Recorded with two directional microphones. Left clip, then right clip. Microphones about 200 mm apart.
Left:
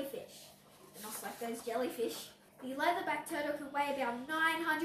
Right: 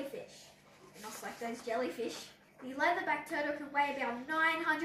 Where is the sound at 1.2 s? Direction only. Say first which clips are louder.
Even; 5° right (ahead or behind).